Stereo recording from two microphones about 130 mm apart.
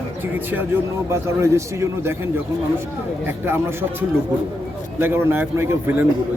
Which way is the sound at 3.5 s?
15° right (ahead or behind).